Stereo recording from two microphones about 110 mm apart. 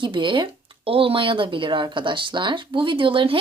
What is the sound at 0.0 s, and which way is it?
Speech, 45° right (ahead or behind).